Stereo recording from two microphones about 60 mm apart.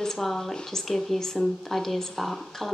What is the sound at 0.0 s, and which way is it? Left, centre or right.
Speech, centre.